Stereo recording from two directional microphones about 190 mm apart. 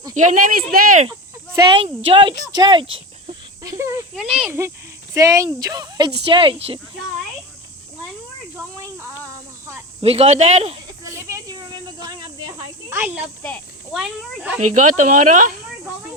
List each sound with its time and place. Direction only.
0.1 s speech: 40° right (ahead or behind)
1.5 s speech: 25° right (ahead or behind)
10.0 s speech: 35° right (ahead or behind)
11.2 s a sound: 15° right (ahead or behind)
12.0 s snake: 20° right (ahead or behind)
13.0 s speech: 10° right (ahead or behind)
13.4 s snake: centre (ahead or behind)
14.7 s speech: 40° right (ahead or behind)